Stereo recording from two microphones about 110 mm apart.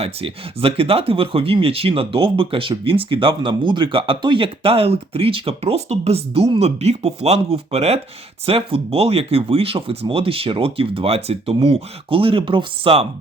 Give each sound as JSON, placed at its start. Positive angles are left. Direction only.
{"t": 0.0, "sound": "speech", "side_deg": -60}